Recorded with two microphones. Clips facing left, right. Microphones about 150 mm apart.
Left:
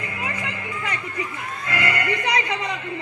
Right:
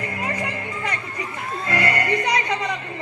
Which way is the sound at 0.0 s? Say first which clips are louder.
Right 3 dB; 40° right (ahead or behind).